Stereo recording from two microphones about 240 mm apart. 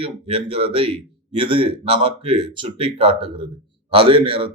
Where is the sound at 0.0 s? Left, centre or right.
Right.